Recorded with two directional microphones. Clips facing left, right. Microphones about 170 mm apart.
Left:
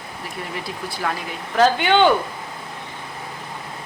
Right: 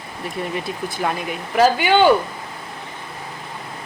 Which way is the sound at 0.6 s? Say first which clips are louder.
Right 3 dB; 20° right (ahead or behind).